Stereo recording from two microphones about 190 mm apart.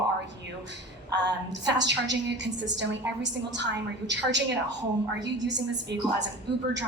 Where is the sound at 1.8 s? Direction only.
65° right (ahead or behind).